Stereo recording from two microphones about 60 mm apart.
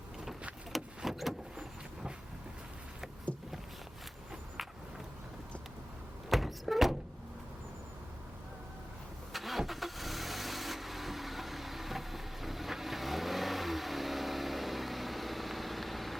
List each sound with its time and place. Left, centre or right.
0.7 s vehicle: centre
6.3 s a sound: centre
9.3 s vehicle: centre